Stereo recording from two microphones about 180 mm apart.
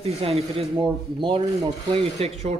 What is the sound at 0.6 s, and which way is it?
Rub, 30° right (ahead or behind).